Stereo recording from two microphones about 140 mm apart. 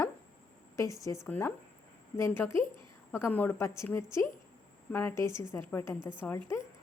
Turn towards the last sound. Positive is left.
turn(degrees=20)  # may be behind; listen again after turning